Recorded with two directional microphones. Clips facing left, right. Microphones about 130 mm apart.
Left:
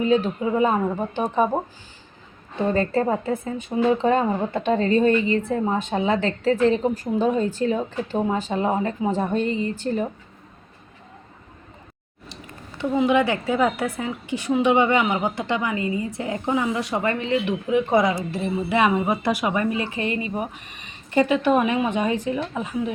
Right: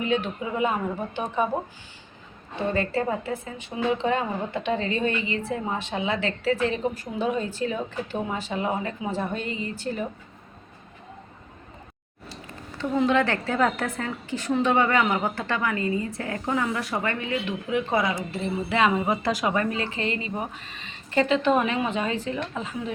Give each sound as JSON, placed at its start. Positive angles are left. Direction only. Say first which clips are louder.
{"t": 0.0, "sound": "a woman's voice", "louder": "left 6 dB", "side_deg": 35}
{"t": 2.7, "sound": "a woman's voice", "louder": "left 4 dB", "side_deg": 40}
{"t": 12.8, "sound": "a woman's voice", "louder": "left 3 dB", "side_deg": 10}